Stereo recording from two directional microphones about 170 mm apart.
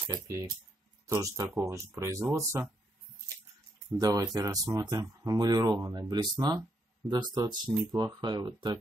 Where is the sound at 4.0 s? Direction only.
20° right (ahead or behind).